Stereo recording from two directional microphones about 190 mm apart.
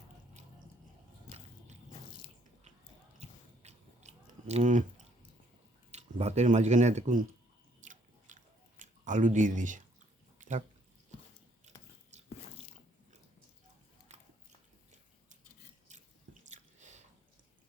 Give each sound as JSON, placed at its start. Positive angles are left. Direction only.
{"t": 3.2, "sound": "biting", "side_deg": -35}
{"t": 5.9, "sound": "speech", "side_deg": -35}
{"t": 7.8, "sound": "biting", "side_deg": -40}
{"t": 8.8, "sound": "speech", "side_deg": -40}
{"t": 10.3, "sound": "a sound", "side_deg": -40}
{"t": 12.1, "sound": "biting", "side_deg": -35}
{"t": 14.1, "sound": "biting", "side_deg": -35}
{"t": 15.9, "sound": "drip", "side_deg": -40}